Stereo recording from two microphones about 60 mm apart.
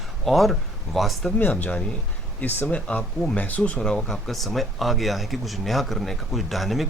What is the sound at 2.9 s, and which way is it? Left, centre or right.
Speech, centre.